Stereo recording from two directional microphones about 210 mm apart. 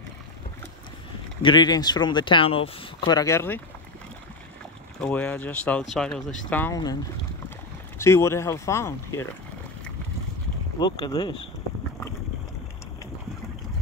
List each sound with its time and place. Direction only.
1.4 s speech: 20° left (ahead or behind)
5.0 s speech: 10° left (ahead or behind)
8.0 s speech: 15° left (ahead or behind)
10.8 s speech: 20° left (ahead or behind)